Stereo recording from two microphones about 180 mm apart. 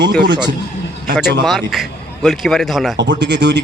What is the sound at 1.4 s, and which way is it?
Speech, centre (ahead or behind).